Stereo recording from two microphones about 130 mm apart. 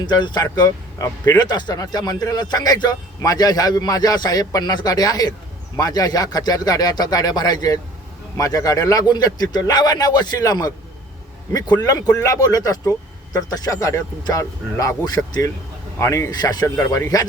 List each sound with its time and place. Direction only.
0.0 s speech: 35° left (ahead or behind)